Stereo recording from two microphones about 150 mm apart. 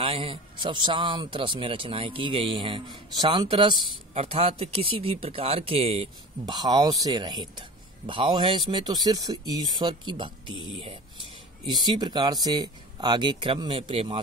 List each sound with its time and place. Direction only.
0.0 s speech: 40° right (ahead or behind)
6.4 s speech: 30° right (ahead or behind)